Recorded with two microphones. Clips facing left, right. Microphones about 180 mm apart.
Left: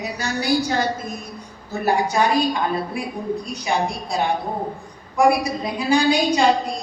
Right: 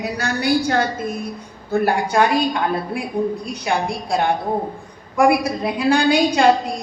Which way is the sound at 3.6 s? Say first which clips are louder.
Right 3 dB; 55° right (ahead or behind).